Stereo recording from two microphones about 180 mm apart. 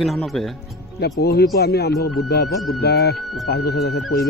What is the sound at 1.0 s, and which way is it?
Speech, 65° left (ahead or behind).